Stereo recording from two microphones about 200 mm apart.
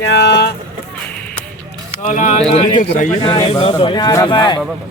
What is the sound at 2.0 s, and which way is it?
Speech, 40° left (ahead or behind).